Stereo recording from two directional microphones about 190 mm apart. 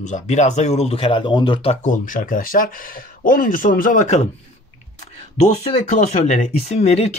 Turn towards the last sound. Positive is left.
turn(degrees=35)  # may be behind; listen again after turning